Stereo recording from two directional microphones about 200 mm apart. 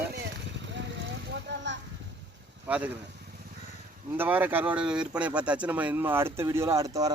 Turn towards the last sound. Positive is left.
turn(degrees=-15)  # may be behind; listen again after turning